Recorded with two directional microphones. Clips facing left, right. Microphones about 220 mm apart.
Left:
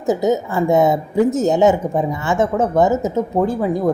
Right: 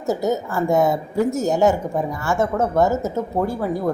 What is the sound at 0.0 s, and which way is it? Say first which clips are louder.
Speech: left 4 dB; 20° left (ahead or behind).